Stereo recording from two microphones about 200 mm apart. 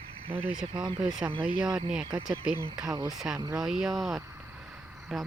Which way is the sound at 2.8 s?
20° right (ahead or behind).